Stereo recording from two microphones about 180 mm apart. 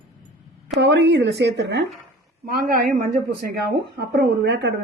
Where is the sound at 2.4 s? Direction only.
50° right (ahead or behind).